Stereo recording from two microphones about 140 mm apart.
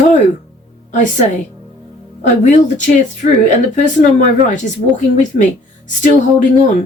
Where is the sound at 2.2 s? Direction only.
60° left (ahead or behind).